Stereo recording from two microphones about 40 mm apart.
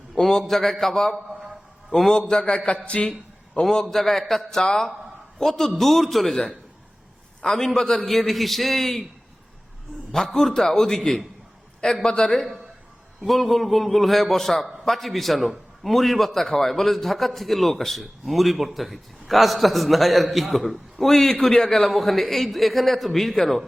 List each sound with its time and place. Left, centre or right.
0.2 s a man's voice: centre
1.1 s a sound: centre
2.0 s a man's voice: centre
2.8 s speech: left
3.6 s a man's voice: centre
4.4 s a man's voice: centre
7.4 s a man's voice: centre
10.1 s a man's voice: centre
12.3 s a man's voice: centre